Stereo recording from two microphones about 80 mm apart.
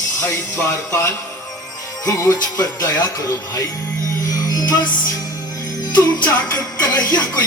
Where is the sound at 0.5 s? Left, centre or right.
Left.